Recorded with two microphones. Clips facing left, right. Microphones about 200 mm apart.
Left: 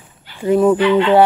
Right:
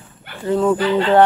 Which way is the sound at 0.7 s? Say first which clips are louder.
Left 4 dB; 40° right (ahead or behind).